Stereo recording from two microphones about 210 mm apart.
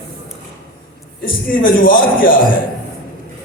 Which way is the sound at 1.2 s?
40° left (ahead or behind).